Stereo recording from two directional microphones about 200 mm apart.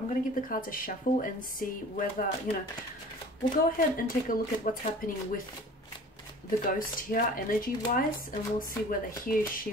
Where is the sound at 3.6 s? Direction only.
45° left (ahead or behind).